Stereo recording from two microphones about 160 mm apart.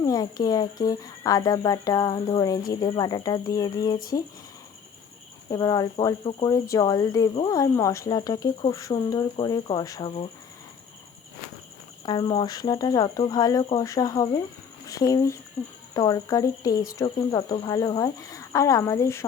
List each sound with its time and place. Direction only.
0.0 s speech: 25° left (ahead or behind)
5.5 s speech: 25° left (ahead or behind)
12.0 s speech: 25° left (ahead or behind)